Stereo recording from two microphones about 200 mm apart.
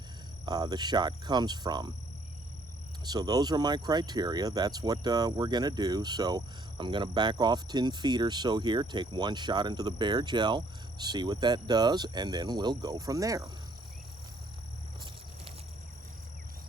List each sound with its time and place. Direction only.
0.4 s speech: 20° right (ahead or behind)
3.0 s speech: 20° right (ahead or behind)